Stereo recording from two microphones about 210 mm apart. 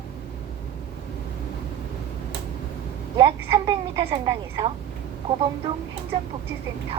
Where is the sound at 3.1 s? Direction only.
25° right (ahead or behind).